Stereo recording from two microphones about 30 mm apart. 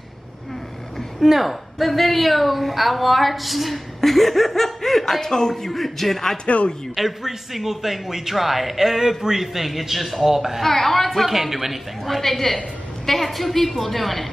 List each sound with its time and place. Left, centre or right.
1.2 s a woman's voice: centre
5.5 s a man's voice: centre
6.4 s speech: left
7.0 s a man's voice: centre
10.3 s a man's voice: centre
10.6 s a man's voice: centre
11.2 s a man's voice: centre
12.1 s a woman's voice: centre